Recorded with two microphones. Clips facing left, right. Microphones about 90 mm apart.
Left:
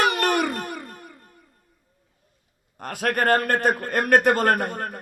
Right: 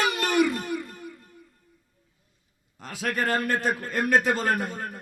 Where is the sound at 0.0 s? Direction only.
55° left (ahead or behind).